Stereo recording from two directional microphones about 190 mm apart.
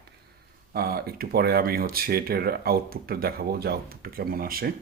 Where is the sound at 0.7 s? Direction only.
55° right (ahead or behind).